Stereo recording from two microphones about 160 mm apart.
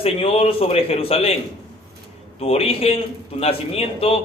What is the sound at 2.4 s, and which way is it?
A man's voice, 40° left (ahead or behind).